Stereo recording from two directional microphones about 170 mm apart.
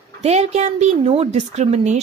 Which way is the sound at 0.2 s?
40° right (ahead or behind).